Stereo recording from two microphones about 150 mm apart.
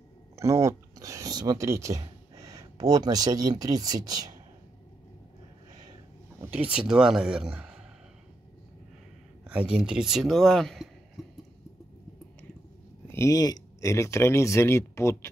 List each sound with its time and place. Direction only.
0.4 s speech: 20° right (ahead or behind)
6.4 s speech: 10° right (ahead or behind)
9.5 s speech: 5° right (ahead or behind)
13.1 s speech: 20° left (ahead or behind)